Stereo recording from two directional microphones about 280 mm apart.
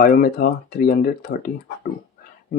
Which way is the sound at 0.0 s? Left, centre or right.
Left.